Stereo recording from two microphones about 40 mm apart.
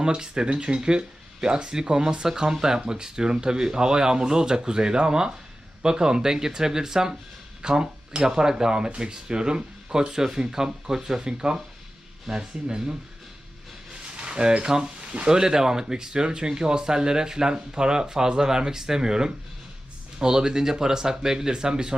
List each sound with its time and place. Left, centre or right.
0.0 s speech: centre
14.1 s speech: right
15.0 s a sound: right
15.3 s speech: centre